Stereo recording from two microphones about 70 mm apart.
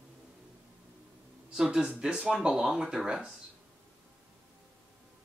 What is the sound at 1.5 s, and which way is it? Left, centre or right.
Speech, centre.